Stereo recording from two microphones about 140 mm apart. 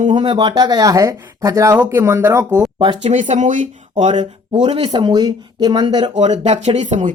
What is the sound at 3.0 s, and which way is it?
Speech, 60° right (ahead or behind).